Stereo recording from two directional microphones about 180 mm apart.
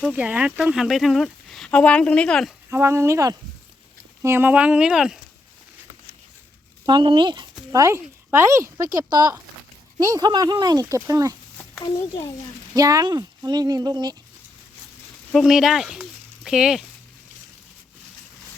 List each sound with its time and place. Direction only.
0.0 s speech: 10° right (ahead or behind)
2.6 s speech: 15° right (ahead or behind)
6.8 s speech: 25° right (ahead or behind)
11.9 s a child's voice: 15° left (ahead or behind)
12.7 s speech: 20° right (ahead or behind)
15.3 s speech: centre (ahead or behind)